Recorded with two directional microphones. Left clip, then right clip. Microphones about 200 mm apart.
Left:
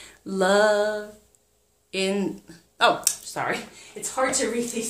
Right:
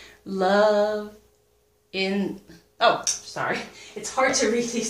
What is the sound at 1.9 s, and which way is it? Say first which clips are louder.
A woman's voice: left 1 dB; 40° left (ahead or behind).